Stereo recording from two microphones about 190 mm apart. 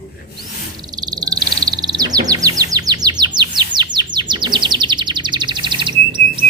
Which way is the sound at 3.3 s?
25° right (ahead or behind).